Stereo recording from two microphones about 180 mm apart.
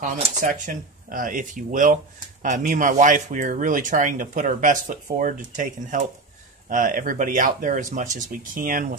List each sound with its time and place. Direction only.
0.2 s speech: 45° right (ahead or behind)